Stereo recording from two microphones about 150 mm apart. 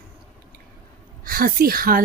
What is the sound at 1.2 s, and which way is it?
Speech, 75° right (ahead or behind).